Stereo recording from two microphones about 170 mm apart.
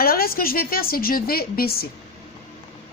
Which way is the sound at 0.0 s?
60° left (ahead or behind).